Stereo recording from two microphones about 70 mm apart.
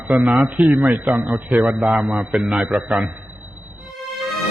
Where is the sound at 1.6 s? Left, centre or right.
Centre.